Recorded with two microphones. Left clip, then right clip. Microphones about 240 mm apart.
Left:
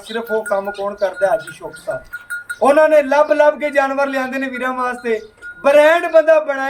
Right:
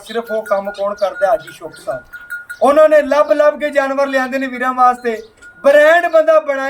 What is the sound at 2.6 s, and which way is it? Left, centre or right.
A man's voice, centre.